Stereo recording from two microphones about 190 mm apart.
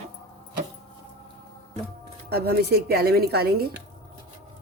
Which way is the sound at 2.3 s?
55° right (ahead or behind).